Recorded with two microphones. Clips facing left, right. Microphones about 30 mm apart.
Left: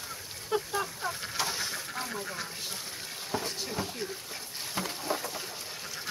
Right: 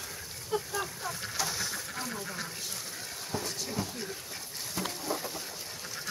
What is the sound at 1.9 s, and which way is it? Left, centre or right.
Duck, centre.